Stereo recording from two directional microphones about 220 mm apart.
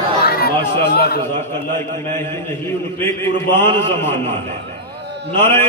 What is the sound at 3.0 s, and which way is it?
A man's voice, 10° left (ahead or behind).